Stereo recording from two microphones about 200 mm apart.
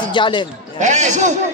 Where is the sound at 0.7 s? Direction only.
35° right (ahead or behind).